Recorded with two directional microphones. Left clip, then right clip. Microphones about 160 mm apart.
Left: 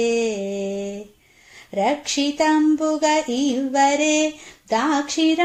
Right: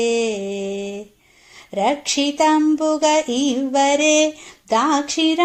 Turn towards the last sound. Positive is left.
turn(degrees=-35)  # may be behind; listen again after turning